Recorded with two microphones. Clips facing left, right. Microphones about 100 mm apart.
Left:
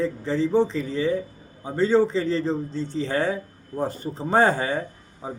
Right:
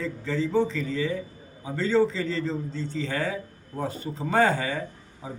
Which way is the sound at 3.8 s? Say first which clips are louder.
Left 3 dB; 45° left (ahead or behind).